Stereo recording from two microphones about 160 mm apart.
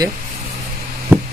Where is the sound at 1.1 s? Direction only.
10° right (ahead or behind).